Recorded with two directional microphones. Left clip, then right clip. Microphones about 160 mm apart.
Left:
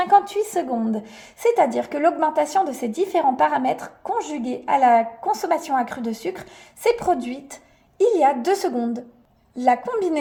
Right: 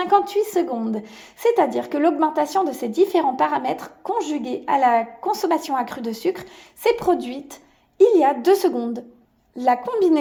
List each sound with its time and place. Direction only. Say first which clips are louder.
0.0 s a woman's voice: left 1 dB; 25° right (ahead or behind)